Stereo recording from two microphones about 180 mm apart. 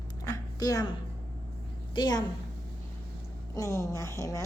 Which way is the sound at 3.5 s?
15° left (ahead or behind).